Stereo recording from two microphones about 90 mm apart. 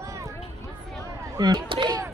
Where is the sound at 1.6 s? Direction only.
70° right (ahead or behind).